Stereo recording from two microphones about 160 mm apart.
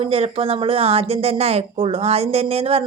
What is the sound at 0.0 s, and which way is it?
Speech, 35° right (ahead or behind).